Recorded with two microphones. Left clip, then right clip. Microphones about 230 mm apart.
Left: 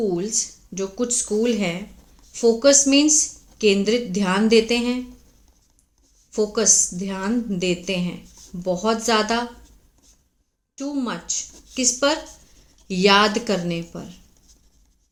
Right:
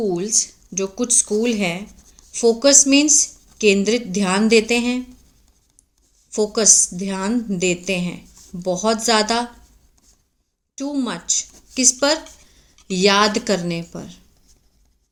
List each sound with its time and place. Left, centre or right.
0.0 s a woman's voice: right
6.3 s a woman's voice: right
10.8 s a woman's voice: right